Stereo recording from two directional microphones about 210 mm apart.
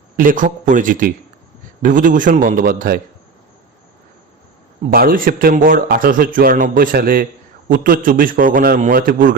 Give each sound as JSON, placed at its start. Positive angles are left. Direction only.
{"t": 0.2, "sound": "a man's voice", "side_deg": -40}
{"t": 4.9, "sound": "a man's voice", "side_deg": -40}